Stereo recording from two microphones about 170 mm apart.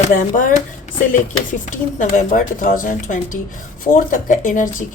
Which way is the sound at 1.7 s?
50° left (ahead or behind).